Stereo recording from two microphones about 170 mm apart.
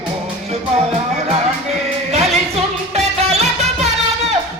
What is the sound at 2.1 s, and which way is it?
Music, 40° right (ahead or behind).